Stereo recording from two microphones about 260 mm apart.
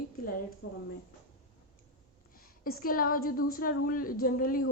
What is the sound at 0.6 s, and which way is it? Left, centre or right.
Speech, left.